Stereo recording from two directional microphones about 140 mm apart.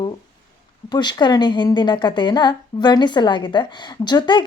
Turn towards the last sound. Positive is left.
turn(degrees=35)  # may be behind; listen again after turning